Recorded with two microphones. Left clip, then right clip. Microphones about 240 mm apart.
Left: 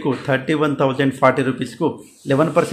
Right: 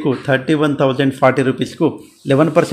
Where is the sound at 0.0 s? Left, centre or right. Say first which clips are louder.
Right 3 dB; centre.